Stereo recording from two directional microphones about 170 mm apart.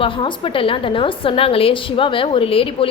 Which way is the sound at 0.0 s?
30° left (ahead or behind).